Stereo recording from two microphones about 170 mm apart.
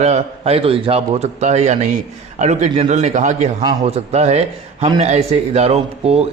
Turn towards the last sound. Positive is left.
turn(degrees=-40)  # may be behind; listen again after turning